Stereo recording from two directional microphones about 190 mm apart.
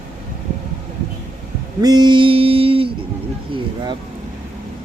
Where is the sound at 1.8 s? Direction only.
20° right (ahead or behind).